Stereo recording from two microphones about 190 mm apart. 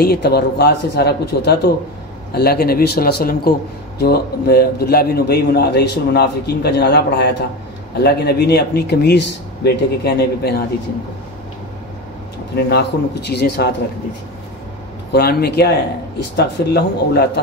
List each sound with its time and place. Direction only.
0.0 s a man's voice: 55° left (ahead or behind)
12.6 s a man's voice: 60° left (ahead or behind)
15.1 s a man's voice: 55° left (ahead or behind)